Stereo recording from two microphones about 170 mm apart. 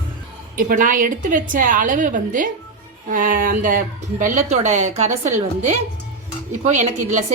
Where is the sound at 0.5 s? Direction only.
50° right (ahead or behind).